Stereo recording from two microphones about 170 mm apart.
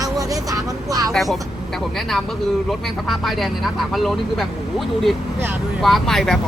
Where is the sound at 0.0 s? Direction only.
20° right (ahead or behind).